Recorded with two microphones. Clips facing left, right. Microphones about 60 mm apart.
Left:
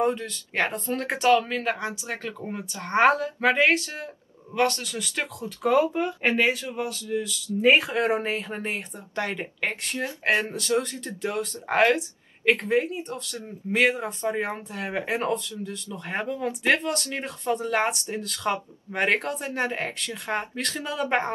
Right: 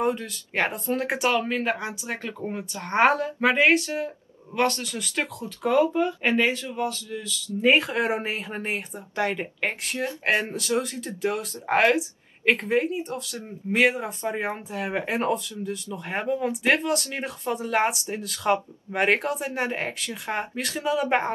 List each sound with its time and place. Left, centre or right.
0.0 s speech: centre
5.6 s speech: centre
7.7 s speech: centre